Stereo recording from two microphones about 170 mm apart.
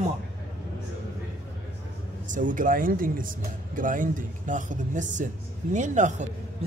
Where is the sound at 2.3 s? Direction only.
50° right (ahead or behind).